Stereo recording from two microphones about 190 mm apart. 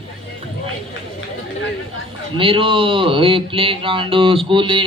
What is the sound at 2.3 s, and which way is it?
Speech, 25° right (ahead or behind).